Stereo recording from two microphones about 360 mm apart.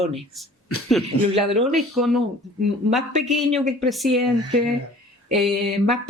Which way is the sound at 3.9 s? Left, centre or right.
Centre.